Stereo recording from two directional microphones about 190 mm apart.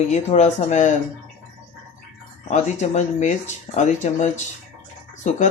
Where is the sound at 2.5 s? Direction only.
35° left (ahead or behind).